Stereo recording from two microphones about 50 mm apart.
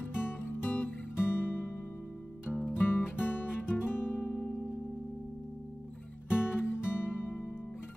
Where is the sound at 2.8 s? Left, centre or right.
Left.